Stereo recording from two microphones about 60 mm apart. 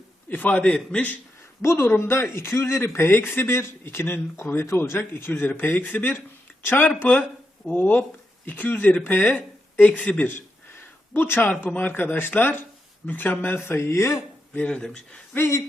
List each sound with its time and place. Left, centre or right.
0.3 s a man's voice: left
1.6 s a man's voice: left
11.1 s speech: left
13.6 s speech: left
14.8 s speech: centre
15.4 s speech: left